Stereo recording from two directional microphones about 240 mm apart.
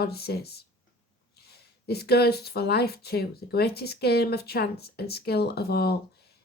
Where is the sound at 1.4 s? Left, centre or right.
Left.